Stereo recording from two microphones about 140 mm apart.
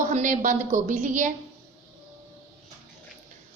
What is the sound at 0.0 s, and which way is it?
A woman's voice, 65° right (ahead or behind).